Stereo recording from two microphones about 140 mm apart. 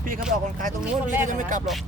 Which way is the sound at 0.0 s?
80° right.